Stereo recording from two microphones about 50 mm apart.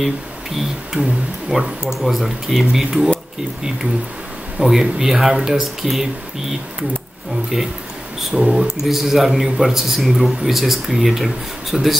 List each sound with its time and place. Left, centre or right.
1.0 s speech: right
1.5 s speech: centre
2.0 s speech: centre
4.6 s speech: centre
7.5 s a man's voice: centre